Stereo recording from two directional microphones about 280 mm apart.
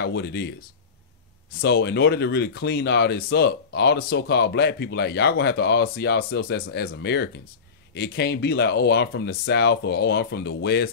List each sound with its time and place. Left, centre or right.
0.0 s speech: left
1.6 s speech: left